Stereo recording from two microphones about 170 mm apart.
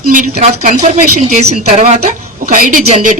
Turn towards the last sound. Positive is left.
turn(degrees=-50)  # may be behind; listen again after turning